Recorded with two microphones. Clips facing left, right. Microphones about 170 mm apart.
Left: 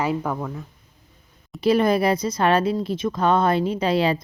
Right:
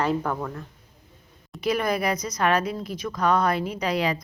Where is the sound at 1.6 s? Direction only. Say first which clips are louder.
Left 6 dB; 30° left (ahead or behind).